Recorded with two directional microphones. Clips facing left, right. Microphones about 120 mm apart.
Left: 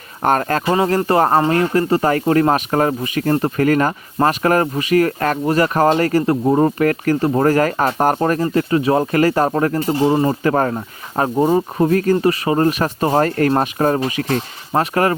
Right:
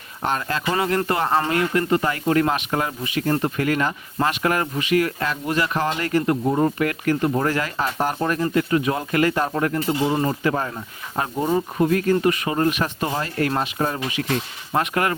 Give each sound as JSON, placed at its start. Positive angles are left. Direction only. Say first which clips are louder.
{"t": 0.2, "sound": "speech", "louder": "left 8 dB", "side_deg": 50}
{"t": 0.6, "sound": "speech", "louder": "left 5 dB", "side_deg": 30}
{"t": 10.4, "sound": "speech", "louder": "left 6 dB", "side_deg": 55}
{"t": 11.2, "sound": "speech", "louder": "left 6 dB", "side_deg": 40}